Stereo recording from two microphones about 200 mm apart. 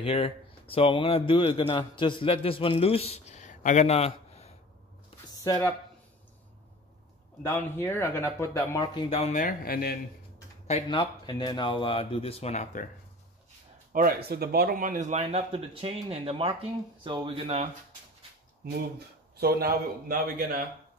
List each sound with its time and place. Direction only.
0.0 s a man's voice: 30° left (ahead or behind)
5.4 s speech: 15° left (ahead or behind)
7.4 s speech: 10° left (ahead or behind)
9.1 s speech: 35° left (ahead or behind)
10.7 s speech: 25° left (ahead or behind)
13.9 s speech: 45° right (ahead or behind); by 17.6 s 25° right (ahead or behind)
18.6 s a man's voice: 55° right (ahead or behind)